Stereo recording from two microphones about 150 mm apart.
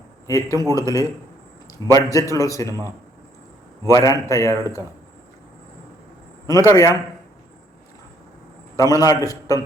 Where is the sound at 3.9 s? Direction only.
20° left (ahead or behind).